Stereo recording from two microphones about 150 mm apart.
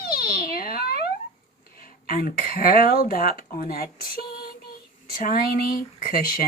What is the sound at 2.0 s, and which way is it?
Speech, 70° left (ahead or behind).